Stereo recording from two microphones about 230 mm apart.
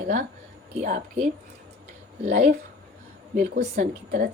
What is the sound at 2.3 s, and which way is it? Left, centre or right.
A woman's voice, right.